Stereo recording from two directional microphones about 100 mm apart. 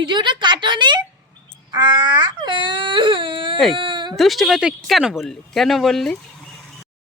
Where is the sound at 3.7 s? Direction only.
55° right (ahead or behind).